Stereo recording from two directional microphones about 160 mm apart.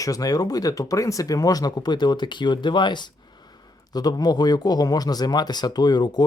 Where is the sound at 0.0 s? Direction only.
20° left (ahead or behind).